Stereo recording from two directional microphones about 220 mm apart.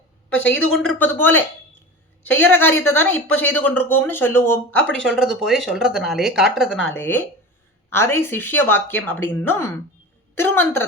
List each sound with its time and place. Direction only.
0.7 s a woman's voice: centre (ahead or behind)